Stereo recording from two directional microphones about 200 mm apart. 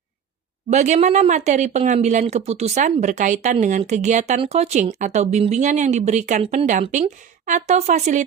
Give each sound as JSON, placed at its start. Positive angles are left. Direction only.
{"t": 0.7, "sound": "speech", "side_deg": -35}